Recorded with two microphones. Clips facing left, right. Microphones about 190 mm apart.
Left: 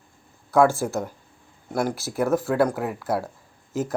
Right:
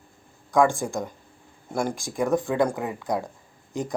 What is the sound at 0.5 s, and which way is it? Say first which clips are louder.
Speech: left 2 dB; 5° left (ahead or behind).